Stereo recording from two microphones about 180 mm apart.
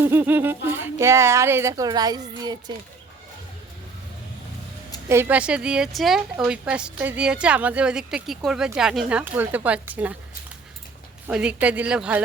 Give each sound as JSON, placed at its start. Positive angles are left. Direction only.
{"t": 0.0, "sound": "speech", "side_deg": -10}
{"t": 5.0, "sound": "speech", "side_deg": -15}
{"t": 11.3, "sound": "speech", "side_deg": -5}